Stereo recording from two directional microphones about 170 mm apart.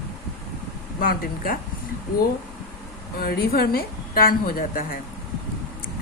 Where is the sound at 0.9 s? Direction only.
60° left (ahead or behind).